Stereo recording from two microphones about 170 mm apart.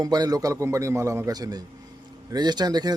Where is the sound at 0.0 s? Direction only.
20° right (ahead or behind).